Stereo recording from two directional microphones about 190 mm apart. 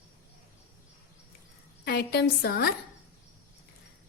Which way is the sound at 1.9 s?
55° left (ahead or behind).